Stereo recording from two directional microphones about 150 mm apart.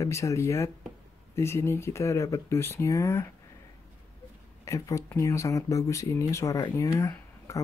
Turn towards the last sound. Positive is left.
turn(degrees=20)  # may be behind; listen again after turning